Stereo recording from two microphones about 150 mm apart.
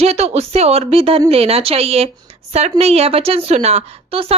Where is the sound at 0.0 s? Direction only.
45° right (ahead or behind).